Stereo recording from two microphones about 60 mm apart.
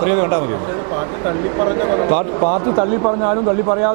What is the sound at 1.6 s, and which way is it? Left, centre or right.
A man's voice, right.